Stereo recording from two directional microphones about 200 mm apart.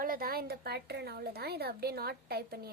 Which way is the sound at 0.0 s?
45° right (ahead or behind).